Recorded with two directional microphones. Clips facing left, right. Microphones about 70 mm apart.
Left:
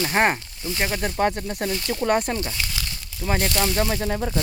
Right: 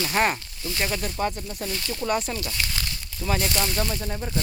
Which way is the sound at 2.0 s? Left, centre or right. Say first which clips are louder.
Left 4 dB; left.